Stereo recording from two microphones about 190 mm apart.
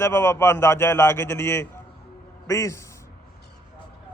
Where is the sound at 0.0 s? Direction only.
15° left (ahead or behind).